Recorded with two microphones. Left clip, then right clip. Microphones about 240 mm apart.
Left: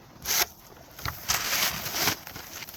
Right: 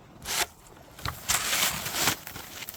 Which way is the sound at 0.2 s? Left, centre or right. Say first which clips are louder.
Left 2 dB; left.